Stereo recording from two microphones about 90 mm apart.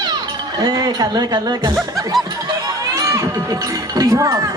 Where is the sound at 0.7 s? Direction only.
45° right (ahead or behind).